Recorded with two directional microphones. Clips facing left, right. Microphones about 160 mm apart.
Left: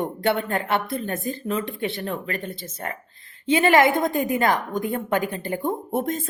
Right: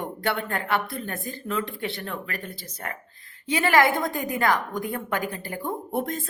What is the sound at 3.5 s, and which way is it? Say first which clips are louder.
A woman's voice: left 4 dB; 25° left (ahead or behind).